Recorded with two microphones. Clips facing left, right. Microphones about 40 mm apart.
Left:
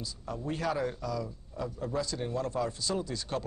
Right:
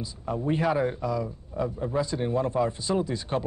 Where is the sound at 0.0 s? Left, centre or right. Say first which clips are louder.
Right 7 dB; right.